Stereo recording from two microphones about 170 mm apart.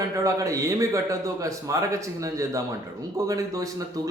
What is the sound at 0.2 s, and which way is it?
A man's voice, 20° right (ahead or behind).